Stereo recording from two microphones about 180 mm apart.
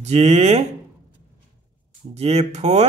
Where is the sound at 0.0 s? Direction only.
35° right (ahead or behind).